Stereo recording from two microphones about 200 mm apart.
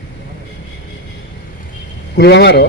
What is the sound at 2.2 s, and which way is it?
Speech, 55° left (ahead or behind).